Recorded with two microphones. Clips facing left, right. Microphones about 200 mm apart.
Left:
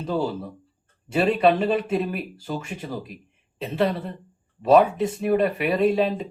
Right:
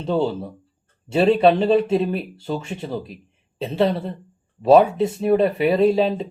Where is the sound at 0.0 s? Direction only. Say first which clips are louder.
Right 4 dB; 25° right (ahead or behind).